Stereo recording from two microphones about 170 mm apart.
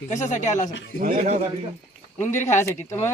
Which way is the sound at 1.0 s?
55° right (ahead or behind).